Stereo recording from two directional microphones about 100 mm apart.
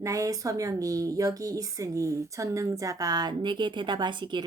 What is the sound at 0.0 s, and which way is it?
A woman's voice, 35° right (ahead or behind).